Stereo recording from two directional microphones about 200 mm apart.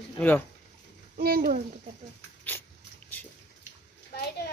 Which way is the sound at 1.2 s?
50° right (ahead or behind).